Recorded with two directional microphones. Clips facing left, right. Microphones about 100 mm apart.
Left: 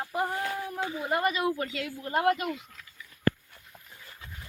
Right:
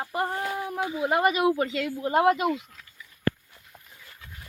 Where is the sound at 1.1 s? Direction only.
90° right.